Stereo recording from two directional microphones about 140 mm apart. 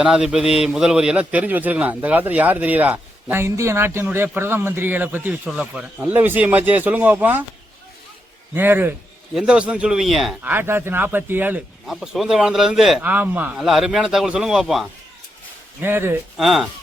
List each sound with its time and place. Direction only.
0.0 s a man's voice: 5° right (ahead or behind)
8.5 s a man's voice: 15° right (ahead or behind)
10.4 s a man's voice: 15° right (ahead or behind)
11.9 s a man's voice: centre (ahead or behind)
13.0 s a man's voice: 10° right (ahead or behind)
15.8 s a man's voice: 15° right (ahead or behind)
16.4 s a man's voice: centre (ahead or behind)